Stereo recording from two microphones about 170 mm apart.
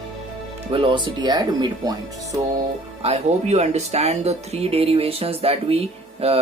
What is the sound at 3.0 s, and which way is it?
Speech, 40° right (ahead or behind).